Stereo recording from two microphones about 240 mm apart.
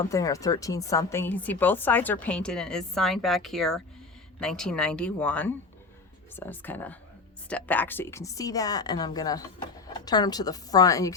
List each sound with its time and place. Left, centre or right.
0.0 s a woman's voice: centre